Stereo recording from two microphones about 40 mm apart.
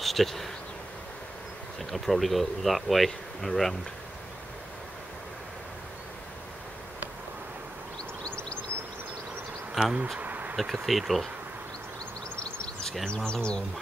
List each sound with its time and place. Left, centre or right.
0.0 s speech: centre
1.8 s speech: centre
8.2 s a sound: left
9.8 s speech: centre
10.2 s bee: right
10.5 s speech: centre
12.4 s a sound: left
13.0 s speech: left